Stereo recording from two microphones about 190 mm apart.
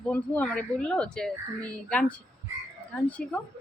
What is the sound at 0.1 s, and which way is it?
A woman's voice, 5° left (ahead or behind).